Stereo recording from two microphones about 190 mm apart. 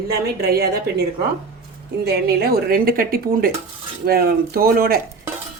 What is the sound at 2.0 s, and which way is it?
Speech, 55° right (ahead or behind).